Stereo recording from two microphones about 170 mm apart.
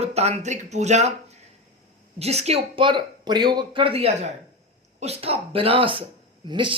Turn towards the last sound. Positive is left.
turn(degrees=-30)  # may be behind; listen again after turning